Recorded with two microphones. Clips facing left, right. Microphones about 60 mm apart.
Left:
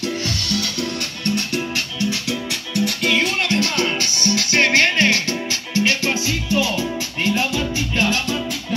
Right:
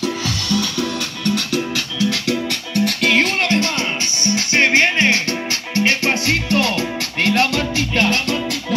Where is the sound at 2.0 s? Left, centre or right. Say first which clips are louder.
Right 6 dB; right.